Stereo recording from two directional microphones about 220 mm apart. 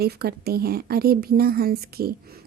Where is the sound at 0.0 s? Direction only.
45° right (ahead or behind).